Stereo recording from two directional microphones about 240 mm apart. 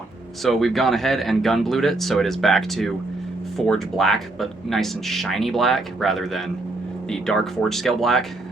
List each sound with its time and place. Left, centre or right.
0.4 s speech: centre